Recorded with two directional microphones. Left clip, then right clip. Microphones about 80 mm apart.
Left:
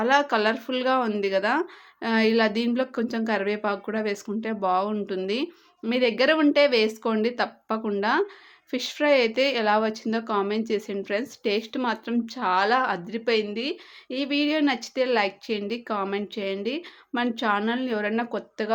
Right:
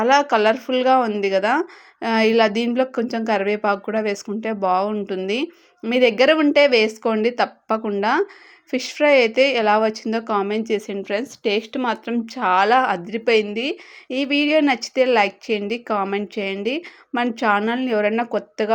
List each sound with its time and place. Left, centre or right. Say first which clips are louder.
0.0 s a woman's voice: right 6 dB; right
8.7 s a woman's voice: right 6 dB; right